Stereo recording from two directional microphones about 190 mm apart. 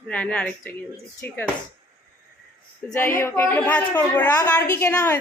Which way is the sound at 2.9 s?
10° left (ahead or behind).